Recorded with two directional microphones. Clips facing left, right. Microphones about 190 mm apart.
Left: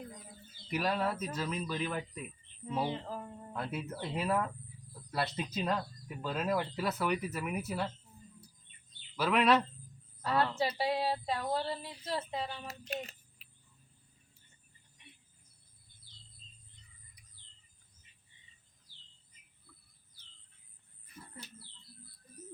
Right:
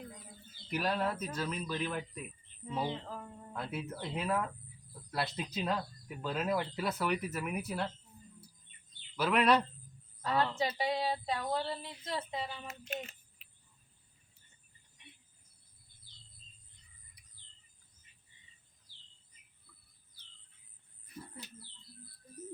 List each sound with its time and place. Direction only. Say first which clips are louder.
0.7 s speech: left 1 dB; centre (ahead or behind)
9.1 s a woman's voice: even; centre (ahead or behind)
12.6 s speech: left 1 dB; 35° left (ahead or behind)